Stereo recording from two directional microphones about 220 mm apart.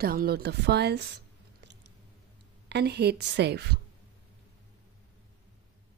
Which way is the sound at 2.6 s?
50° right (ahead or behind).